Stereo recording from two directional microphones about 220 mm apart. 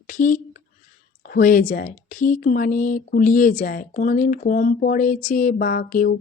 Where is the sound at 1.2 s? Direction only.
40° left (ahead or behind).